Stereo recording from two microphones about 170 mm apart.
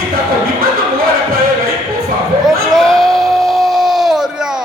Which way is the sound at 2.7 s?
Centre (ahead or behind).